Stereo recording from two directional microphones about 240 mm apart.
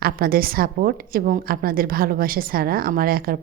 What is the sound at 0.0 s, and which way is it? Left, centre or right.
A woman's voice, right.